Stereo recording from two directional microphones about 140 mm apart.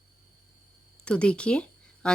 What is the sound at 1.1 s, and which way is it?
Speech, 10° left (ahead or behind).